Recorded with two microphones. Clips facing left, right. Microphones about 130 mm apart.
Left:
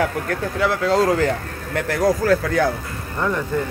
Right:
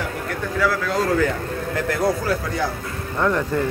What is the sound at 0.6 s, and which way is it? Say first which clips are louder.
Speech: left 3 dB; 30° left (ahead or behind).